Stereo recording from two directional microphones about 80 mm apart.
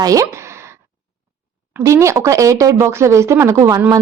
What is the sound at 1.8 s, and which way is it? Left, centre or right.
A woman's voice, right.